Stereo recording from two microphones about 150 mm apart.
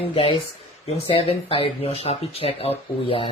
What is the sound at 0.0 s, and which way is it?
Speech, 40° left (ahead or behind).